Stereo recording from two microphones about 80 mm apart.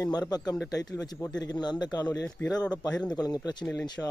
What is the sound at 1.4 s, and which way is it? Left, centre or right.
Speech, left.